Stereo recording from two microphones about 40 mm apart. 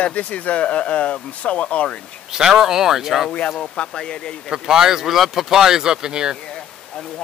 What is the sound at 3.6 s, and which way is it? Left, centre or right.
Speech, centre.